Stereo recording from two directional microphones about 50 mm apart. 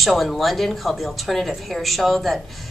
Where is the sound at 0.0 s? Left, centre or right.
Centre.